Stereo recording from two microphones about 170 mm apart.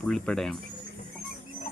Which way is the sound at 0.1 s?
5° left (ahead or behind).